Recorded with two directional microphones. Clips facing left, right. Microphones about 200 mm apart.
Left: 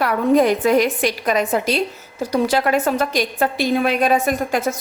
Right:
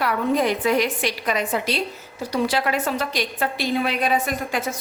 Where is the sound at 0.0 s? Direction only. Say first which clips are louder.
Left 6 dB; 45° left (ahead or behind).